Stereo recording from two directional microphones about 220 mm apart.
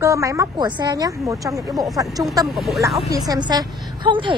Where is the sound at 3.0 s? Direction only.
15° right (ahead or behind).